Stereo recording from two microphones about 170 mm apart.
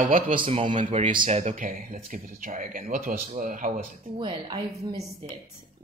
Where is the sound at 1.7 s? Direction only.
55° right (ahead or behind).